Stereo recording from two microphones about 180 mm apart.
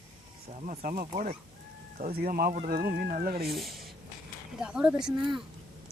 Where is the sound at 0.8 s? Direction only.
50° right (ahead or behind).